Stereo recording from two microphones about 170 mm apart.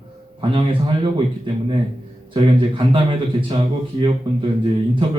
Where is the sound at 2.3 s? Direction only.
30° right (ahead or behind).